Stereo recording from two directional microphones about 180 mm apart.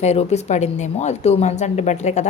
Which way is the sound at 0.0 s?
35° left (ahead or behind).